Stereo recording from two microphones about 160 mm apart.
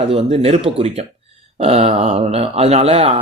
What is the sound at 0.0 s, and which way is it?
Speech, 35° right (ahead or behind).